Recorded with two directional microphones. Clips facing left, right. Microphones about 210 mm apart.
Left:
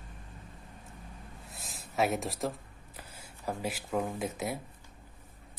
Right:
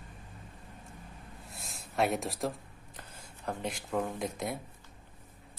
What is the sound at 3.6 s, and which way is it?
Speech, 5° left (ahead or behind).